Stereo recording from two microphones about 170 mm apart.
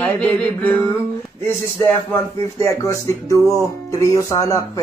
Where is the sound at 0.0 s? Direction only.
5° left (ahead or behind).